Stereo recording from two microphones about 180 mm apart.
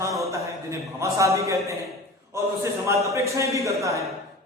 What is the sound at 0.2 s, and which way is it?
A man's voice, 15° right (ahead or behind).